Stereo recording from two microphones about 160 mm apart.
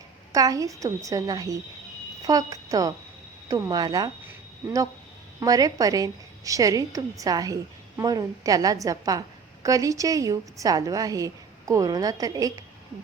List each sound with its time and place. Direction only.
0.3 s a woman's voice: 20° right (ahead or behind)
5.4 s a woman's voice: 20° right (ahead or behind)